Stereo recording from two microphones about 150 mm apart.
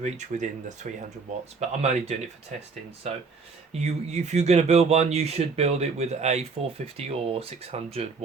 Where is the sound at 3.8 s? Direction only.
50° right (ahead or behind).